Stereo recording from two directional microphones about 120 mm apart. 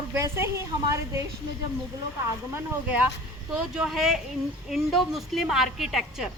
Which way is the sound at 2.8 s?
15° right (ahead or behind).